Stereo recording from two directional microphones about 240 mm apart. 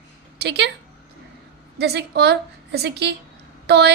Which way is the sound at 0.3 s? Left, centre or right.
Right.